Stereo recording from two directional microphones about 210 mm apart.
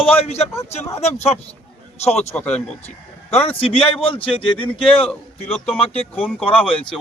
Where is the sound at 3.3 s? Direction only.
30° left (ahead or behind).